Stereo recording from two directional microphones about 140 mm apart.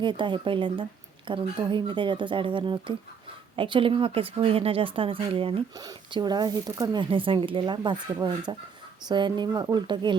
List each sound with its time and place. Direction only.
0.0 s speech: 35° right (ahead or behind)